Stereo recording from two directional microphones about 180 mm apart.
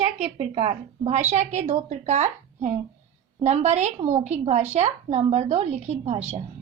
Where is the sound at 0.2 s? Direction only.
35° right (ahead or behind).